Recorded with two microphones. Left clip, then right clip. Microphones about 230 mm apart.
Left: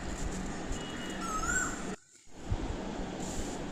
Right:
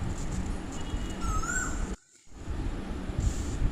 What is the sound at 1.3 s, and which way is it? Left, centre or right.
Dog, centre.